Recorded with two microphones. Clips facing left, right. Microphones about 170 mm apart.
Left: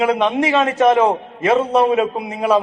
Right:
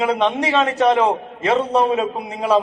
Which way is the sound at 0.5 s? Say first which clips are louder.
Left 2 dB; 15° left (ahead or behind).